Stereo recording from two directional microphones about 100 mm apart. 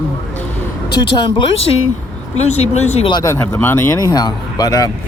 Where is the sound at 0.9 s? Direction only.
50° left (ahead or behind).